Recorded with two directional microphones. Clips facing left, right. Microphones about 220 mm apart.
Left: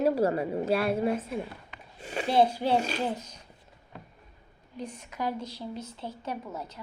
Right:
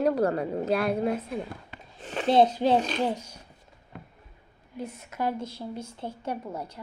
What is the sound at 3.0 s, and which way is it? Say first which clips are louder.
Speech: right 3 dB; 10° right (ahead or behind).